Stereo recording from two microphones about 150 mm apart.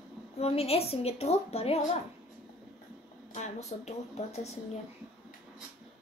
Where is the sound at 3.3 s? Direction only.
50° left (ahead or behind).